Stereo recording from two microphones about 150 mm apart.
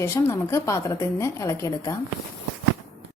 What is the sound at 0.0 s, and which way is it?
A woman's voice, 20° left (ahead or behind).